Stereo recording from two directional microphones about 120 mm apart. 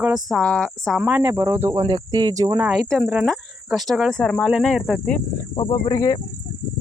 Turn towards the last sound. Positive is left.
turn(degrees=25)  # may be behind; listen again after turning